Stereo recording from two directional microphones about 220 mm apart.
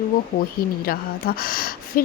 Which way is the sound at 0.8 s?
45° left (ahead or behind).